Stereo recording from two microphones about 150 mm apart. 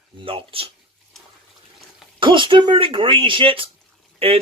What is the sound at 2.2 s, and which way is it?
Speech, 35° right (ahead or behind).